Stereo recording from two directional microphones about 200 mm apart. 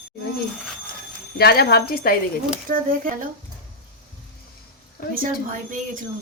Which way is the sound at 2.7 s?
45° right (ahead or behind).